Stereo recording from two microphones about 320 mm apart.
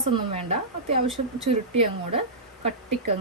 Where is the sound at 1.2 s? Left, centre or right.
Right.